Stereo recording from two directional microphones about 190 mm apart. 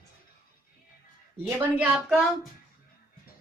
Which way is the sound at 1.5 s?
10° right (ahead or behind).